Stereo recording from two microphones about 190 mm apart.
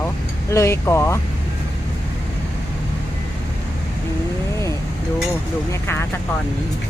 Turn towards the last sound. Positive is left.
turn(degrees=10)  # may be behind; listen again after turning